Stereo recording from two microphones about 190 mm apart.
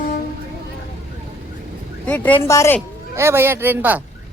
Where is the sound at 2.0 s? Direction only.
10° left (ahead or behind).